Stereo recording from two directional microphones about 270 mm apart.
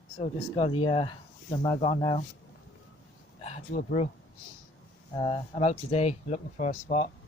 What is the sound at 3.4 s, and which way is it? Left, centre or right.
Speech, left.